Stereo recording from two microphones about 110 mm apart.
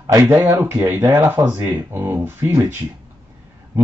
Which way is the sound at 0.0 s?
30° right (ahead or behind).